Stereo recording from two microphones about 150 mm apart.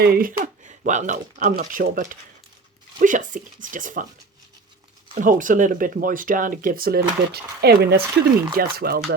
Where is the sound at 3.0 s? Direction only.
60° right (ahead or behind).